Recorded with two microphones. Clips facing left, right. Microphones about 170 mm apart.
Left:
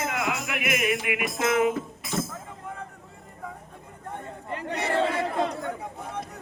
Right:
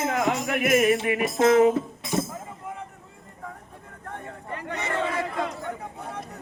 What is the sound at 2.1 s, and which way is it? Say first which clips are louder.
Music: right 3 dB; 15° right (ahead or behind).